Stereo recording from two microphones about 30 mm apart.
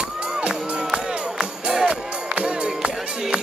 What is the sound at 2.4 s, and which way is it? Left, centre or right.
Music, right.